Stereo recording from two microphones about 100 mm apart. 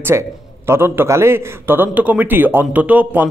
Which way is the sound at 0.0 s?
25° right (ahead or behind).